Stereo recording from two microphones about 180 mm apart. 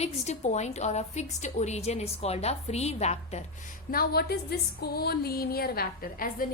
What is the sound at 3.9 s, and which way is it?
A woman's voice, 60° left (ahead or behind).